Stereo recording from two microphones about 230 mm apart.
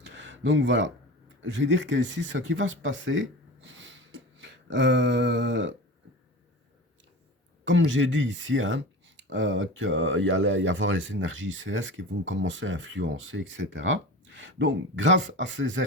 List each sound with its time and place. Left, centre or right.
0.0 s a sound: right
1.4 s speech: right
7.6 s speech: right